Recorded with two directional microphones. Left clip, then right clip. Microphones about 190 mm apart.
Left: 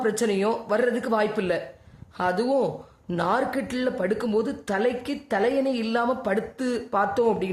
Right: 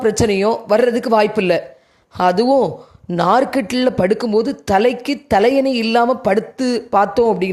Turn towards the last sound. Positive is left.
turn(degrees=-30)  # may be behind; listen again after turning